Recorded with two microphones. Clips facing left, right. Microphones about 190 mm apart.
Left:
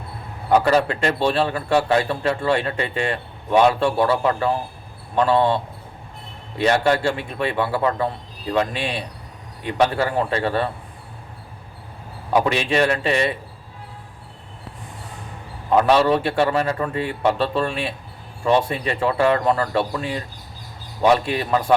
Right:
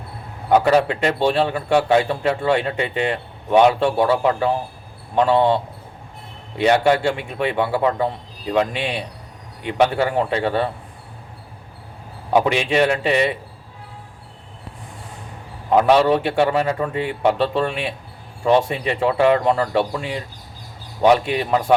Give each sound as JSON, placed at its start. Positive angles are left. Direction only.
{"t": 0.6, "sound": "a man's voice", "side_deg": -15}
{"t": 2.9, "sound": "a man's voice", "side_deg": -20}
{"t": 6.6, "sound": "a man's voice", "side_deg": -10}
{"t": 12.3, "sound": "a man's voice", "side_deg": -15}
{"t": 15.7, "sound": "a man's voice", "side_deg": -15}